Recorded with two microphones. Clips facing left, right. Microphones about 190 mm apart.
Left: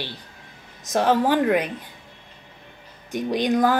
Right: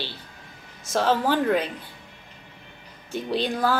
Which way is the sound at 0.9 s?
15° left (ahead or behind).